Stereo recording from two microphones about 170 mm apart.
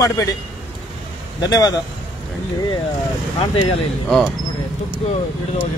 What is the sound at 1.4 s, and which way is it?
Speech, 25° left (ahead or behind).